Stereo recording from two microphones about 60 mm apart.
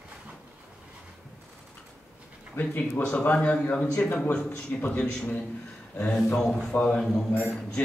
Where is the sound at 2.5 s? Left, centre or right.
Left.